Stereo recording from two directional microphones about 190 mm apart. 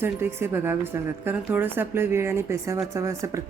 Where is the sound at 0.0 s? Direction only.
10° right (ahead or behind).